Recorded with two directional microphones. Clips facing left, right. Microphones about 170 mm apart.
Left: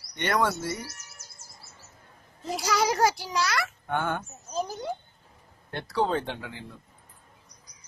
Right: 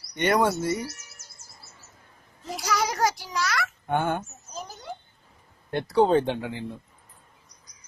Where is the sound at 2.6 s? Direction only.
30° left (ahead or behind).